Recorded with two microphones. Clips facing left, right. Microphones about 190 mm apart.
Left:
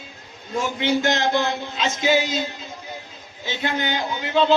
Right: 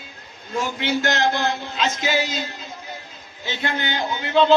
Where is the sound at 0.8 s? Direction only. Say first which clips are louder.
Left 1 dB; 15° left (ahead or behind).